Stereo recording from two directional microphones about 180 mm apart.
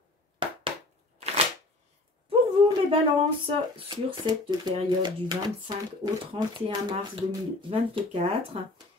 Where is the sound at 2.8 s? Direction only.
30° right (ahead or behind).